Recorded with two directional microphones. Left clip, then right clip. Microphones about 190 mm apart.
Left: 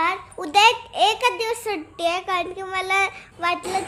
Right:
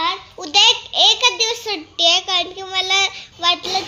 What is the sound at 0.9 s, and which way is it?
A child's voice, 5° right (ahead or behind).